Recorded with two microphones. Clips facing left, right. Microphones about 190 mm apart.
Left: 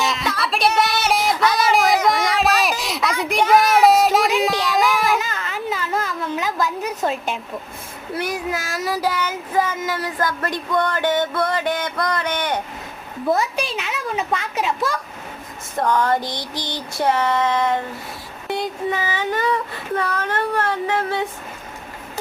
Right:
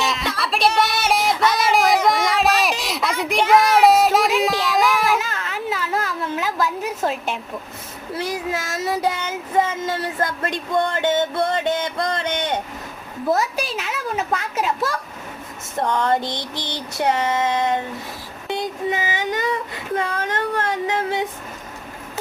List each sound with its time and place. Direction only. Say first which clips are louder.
0.0 s a sound: left 1 dB; centre (ahead or behind)
8.2 s child singing: even; 25° right (ahead or behind)
13.2 s a child's voice: even; centre (ahead or behind)
15.7 s child singing: left 1 dB; 25° right (ahead or behind)
18.9 s child singing: even; 15° right (ahead or behind)
20.2 s speech: left 1 dB; 15° right (ahead or behind)